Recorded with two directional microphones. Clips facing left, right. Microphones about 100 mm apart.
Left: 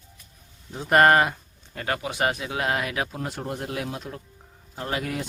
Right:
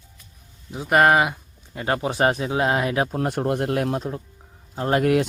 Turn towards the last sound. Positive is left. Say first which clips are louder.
# right 10 dB
turn(degrees=-65)  # may be behind; listen again after turning